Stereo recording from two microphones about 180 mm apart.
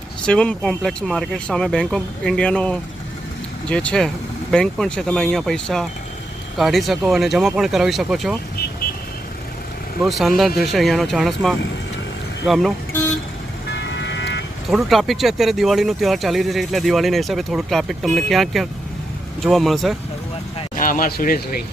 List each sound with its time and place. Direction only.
0.3 s speech: 5° left (ahead or behind)
10.0 s speech: centre (ahead or behind)
13.7 s vehicle: 75° left (ahead or behind)
14.7 s speech: centre (ahead or behind)
20.7 s speech: 50° left (ahead or behind)